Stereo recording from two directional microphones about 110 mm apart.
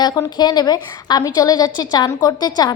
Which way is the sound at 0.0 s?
35° left (ahead or behind).